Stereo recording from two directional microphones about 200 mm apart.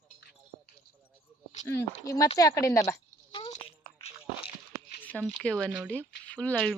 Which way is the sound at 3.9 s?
25° left (ahead or behind).